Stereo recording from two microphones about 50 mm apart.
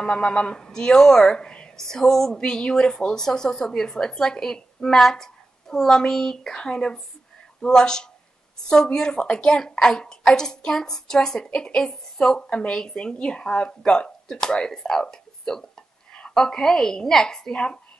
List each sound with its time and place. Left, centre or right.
0.0 s a woman's voice: centre
1.8 s a woman's voice: centre